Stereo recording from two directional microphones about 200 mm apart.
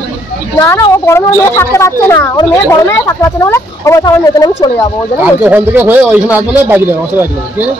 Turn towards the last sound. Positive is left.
turn(degrees=-10)  # may be behind; listen again after turning